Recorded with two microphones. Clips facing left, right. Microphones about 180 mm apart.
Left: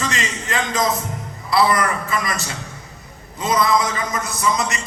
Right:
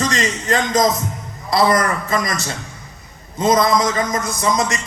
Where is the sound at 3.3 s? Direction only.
40° right (ahead or behind).